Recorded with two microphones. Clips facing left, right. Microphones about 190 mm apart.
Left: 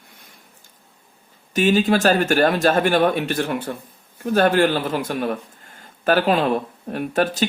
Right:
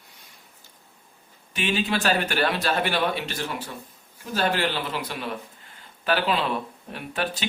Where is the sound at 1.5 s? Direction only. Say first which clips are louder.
Left 9 dB; 40° left (ahead or behind).